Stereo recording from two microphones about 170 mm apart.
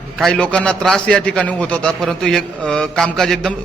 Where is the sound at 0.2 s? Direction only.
5° left (ahead or behind).